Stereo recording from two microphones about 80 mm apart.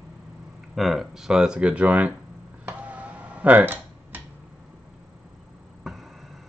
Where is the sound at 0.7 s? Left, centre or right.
Centre.